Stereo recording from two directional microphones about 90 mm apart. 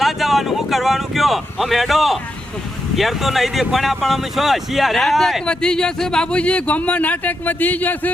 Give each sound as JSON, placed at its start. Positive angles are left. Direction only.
{"t": 0.0, "sound": "speech", "side_deg": 0}